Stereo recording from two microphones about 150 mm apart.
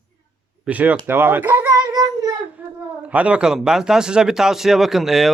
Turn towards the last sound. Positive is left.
turn(degrees=0)  # may be behind; listen again after turning